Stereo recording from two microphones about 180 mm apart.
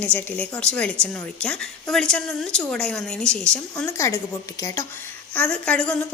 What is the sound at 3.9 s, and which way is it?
Speech, 15° left (ahead or behind).